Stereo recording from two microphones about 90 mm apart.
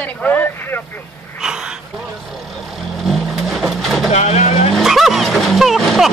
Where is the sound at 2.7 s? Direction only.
Centre (ahead or behind).